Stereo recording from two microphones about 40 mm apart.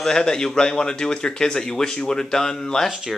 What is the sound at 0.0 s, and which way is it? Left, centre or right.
Speech, centre.